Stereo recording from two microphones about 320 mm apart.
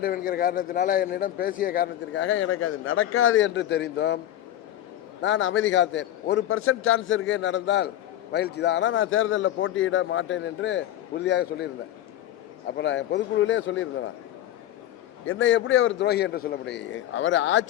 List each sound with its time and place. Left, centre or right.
0.0 s a man's voice: left
5.2 s a man's voice: left
12.7 s a man's voice: left
15.3 s a man's voice: left